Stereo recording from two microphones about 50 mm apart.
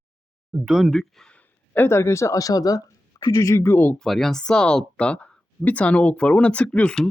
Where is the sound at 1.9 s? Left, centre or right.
Left.